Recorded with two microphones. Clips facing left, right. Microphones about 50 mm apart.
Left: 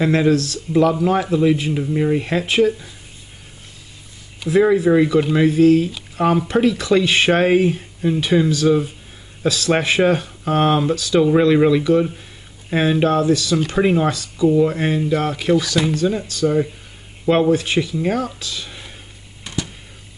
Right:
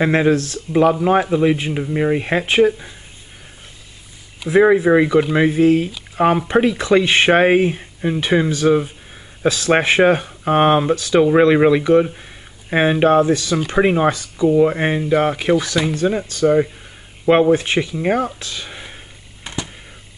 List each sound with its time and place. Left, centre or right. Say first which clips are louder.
0.0 s speech: right 1 dB; right
4.5 s speech: right 2 dB; right
19.4 s a sound: left 1 dB; right